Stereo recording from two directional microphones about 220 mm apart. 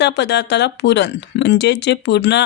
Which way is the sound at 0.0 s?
50° left (ahead or behind).